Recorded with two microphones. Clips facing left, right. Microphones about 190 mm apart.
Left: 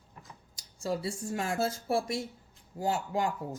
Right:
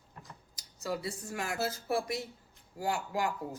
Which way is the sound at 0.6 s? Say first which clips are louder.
Left 3 dB; 25° left (ahead or behind).